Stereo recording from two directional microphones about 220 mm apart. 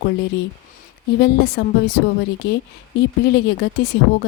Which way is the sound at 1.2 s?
45° left (ahead or behind).